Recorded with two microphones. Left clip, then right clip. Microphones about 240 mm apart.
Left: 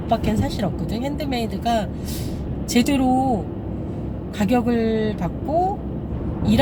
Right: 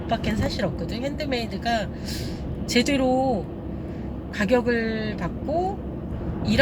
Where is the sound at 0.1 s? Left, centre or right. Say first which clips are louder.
Left 4 dB; centre.